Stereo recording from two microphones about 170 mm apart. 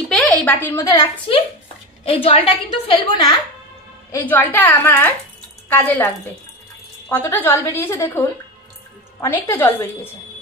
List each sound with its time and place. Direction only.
0.1 s a sound: 5° left (ahead or behind)
2.0 s a woman's voice: 30° left (ahead or behind)
4.1 s a woman's voice: 10° left (ahead or behind)